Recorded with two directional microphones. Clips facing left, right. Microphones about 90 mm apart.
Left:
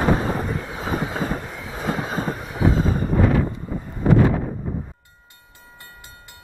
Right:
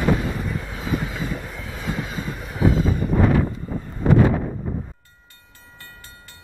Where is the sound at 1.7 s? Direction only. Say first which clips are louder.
Left 4 dB; 40° left (ahead or behind).